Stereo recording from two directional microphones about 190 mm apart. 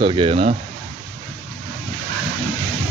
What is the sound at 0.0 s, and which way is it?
Speech, 30° right (ahead or behind).